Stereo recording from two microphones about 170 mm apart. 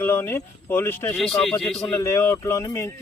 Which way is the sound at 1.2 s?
Centre (ahead or behind).